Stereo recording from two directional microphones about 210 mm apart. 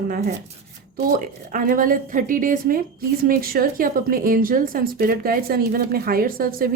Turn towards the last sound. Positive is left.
turn(degrees=-45)  # may be behind; listen again after turning